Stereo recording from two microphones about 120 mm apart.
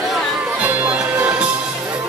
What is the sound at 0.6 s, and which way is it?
Music, 15° right (ahead or behind).